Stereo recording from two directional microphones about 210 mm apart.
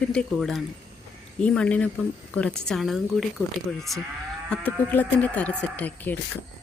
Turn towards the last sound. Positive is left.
turn(degrees=10)  # may be behind; listen again after turning